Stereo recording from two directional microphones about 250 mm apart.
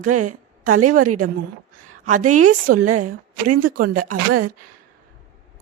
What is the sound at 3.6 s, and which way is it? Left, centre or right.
Speech, right.